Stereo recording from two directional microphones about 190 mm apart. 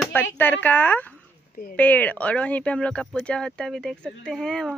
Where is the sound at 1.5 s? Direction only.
50° left (ahead or behind).